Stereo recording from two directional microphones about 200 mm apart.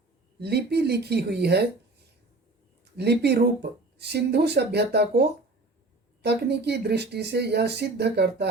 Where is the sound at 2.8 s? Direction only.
55° right (ahead or behind).